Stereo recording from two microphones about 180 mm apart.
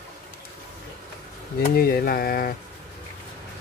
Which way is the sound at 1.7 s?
60° left (ahead or behind).